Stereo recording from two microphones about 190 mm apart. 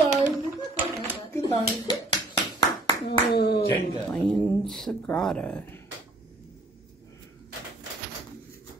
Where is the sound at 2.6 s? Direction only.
20° left (ahead or behind).